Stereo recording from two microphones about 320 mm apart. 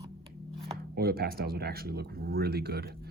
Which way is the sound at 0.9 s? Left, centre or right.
Right.